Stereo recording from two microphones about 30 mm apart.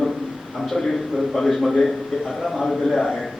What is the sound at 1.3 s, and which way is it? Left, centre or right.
A man's voice, centre.